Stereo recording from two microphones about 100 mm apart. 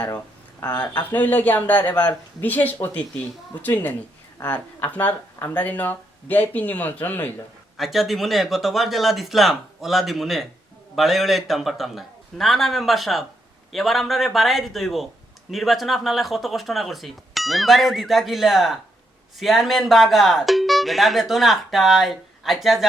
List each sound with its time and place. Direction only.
0.8 s speech: 15° left (ahead or behind)
7.8 s speech: centre (ahead or behind)